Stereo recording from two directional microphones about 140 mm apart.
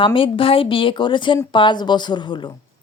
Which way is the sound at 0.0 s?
40° left (ahead or behind).